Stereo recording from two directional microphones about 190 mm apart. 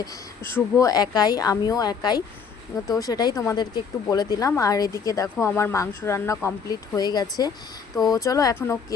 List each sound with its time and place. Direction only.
0.0 s speech: 15° left (ahead or behind)